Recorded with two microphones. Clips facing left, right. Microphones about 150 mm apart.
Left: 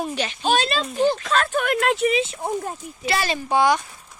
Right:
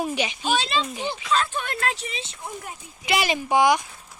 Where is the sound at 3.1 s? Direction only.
15° right (ahead or behind).